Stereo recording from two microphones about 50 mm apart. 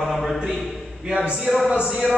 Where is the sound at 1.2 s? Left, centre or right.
Right.